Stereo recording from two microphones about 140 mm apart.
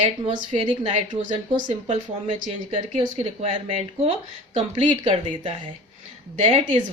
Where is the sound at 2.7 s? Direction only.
45° right (ahead or behind).